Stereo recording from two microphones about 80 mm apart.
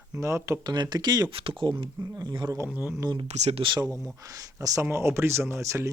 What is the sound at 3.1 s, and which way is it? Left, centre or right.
Speech, right.